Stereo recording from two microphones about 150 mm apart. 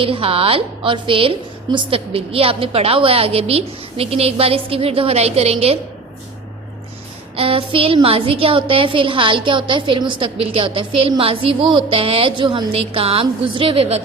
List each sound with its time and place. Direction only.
0.0 s a woman's voice: 40° right (ahead or behind)
7.3 s a woman's voice: 40° right (ahead or behind)